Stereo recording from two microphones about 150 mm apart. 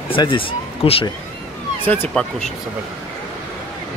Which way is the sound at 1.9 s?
5° left (ahead or behind).